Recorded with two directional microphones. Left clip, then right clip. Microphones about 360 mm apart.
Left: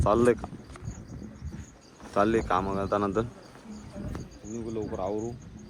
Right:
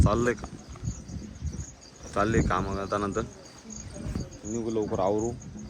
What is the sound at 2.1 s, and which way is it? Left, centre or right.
Speech, centre.